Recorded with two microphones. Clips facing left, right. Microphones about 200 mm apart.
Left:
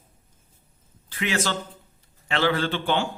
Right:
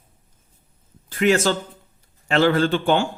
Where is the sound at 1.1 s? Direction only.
45° right (ahead or behind).